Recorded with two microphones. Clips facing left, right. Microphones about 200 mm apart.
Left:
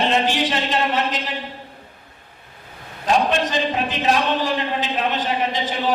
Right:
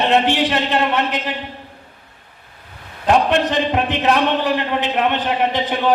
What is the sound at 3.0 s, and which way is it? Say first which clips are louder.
A man's voice: right 4 dB; 60° right (ahead or behind).